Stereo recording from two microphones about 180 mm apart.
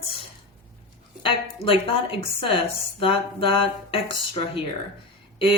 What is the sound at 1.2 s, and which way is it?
Speech, 30° left (ahead or behind).